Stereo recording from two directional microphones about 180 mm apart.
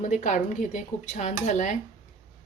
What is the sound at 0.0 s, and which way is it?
Speech, 45° left (ahead or behind).